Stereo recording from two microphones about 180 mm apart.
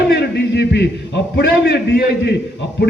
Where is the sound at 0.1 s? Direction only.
70° left (ahead or behind).